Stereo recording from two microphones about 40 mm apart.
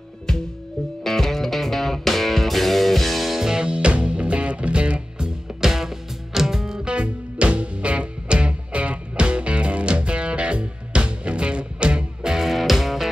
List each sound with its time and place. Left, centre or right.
0.3 s music: centre
3.3 s music: centre
5.6 s music: centre
6.9 s music: right; by 13.1 s centre